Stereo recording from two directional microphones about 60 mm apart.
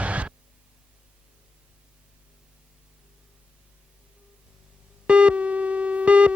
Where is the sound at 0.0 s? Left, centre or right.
Right.